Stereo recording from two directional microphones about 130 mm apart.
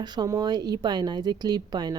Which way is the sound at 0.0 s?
30° right (ahead or behind).